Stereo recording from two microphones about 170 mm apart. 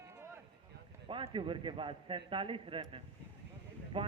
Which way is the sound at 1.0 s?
30° right (ahead or behind).